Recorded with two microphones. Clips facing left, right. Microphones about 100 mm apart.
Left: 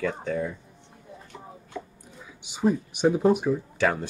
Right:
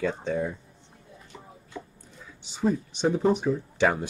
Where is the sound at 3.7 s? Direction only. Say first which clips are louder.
Right 3 dB; 20° right (ahead or behind).